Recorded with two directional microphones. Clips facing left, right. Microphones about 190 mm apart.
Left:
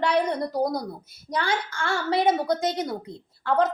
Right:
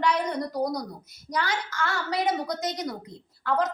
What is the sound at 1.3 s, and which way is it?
A woman's voice, 30° left (ahead or behind).